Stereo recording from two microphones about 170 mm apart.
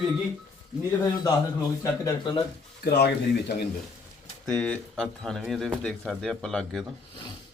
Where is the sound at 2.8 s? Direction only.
80° left.